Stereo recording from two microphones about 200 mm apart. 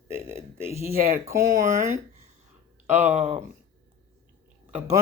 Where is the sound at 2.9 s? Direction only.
35° right (ahead or behind).